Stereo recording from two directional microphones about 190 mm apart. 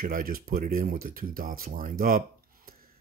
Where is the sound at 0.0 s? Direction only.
50° right (ahead or behind).